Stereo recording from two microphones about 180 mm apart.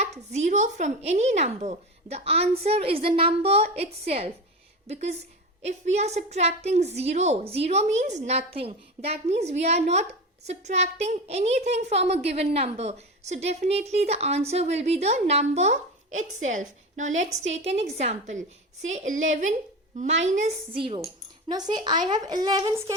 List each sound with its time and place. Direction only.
0.0 s a woman's voice: 40° right (ahead or behind)
20.7 s a woman's voice: 30° right (ahead or behind)